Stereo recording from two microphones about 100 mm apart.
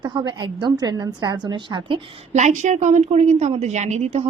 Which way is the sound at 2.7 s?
90° right.